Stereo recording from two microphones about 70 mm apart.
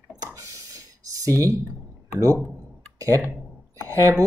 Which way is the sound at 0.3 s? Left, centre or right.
Right.